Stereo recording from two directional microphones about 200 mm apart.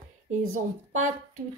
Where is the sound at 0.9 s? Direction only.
40° right (ahead or behind).